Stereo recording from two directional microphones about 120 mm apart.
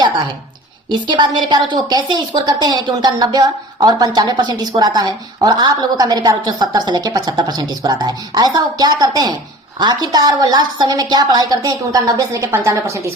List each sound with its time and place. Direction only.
0.9 s a woman's voice: 40° right (ahead or behind)